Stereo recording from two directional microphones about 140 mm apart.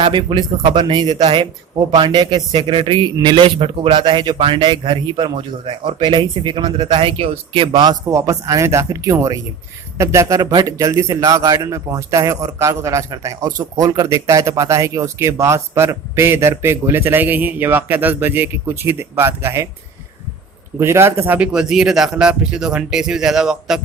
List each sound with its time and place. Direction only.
0.0 s a man's voice: 35° right (ahead or behind); by 19.6 s 15° right (ahead or behind)
20.7 s speech: 20° right (ahead or behind)